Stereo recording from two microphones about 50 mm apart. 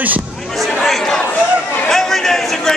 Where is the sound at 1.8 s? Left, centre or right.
Centre.